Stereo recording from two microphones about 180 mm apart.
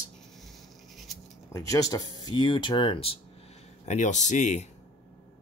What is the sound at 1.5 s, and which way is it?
Speech, 20° left (ahead or behind).